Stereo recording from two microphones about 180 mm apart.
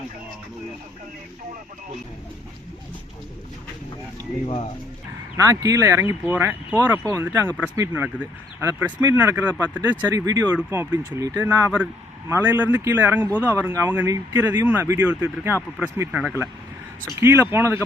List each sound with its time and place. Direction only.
5.4 s speech: 20° right (ahead or behind)